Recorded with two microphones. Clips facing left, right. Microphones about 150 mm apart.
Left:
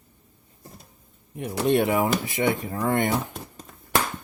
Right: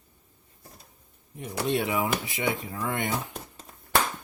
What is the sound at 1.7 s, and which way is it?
Speech, 55° left (ahead or behind).